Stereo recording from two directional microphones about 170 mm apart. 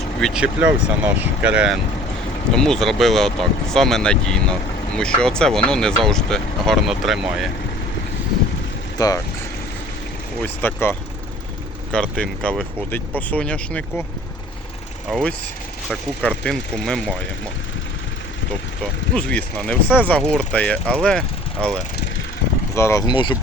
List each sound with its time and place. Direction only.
0.2 s speech: centre (ahead or behind)
9.0 s speech: 20° left (ahead or behind)
10.4 s speech: 10° left (ahead or behind)
15.1 s speech: 5° left (ahead or behind)
19.1 s speech: 5° left (ahead or behind)
20.8 s speech: 10° right (ahead or behind)
21.1 s speech: 5° left (ahead or behind)
22.7 s speech: 15° left (ahead or behind)